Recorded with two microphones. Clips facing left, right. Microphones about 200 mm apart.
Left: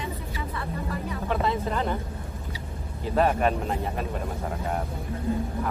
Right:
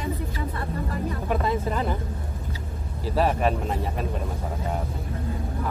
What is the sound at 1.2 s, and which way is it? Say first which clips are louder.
Speech: even; 5° right (ahead or behind).